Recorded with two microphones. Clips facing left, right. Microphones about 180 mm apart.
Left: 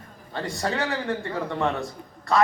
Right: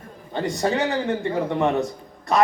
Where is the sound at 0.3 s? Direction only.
20° right (ahead or behind).